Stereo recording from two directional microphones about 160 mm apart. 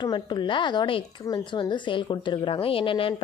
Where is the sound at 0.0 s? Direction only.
30° left (ahead or behind).